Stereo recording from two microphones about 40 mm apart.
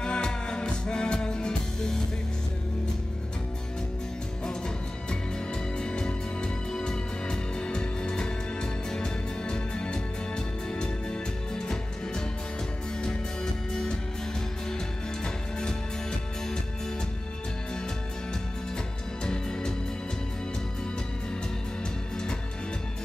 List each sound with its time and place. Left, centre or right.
0.0 s music: left
5.8 s music: left
13.0 s music: centre
15.6 s music: centre
19.2 s music: left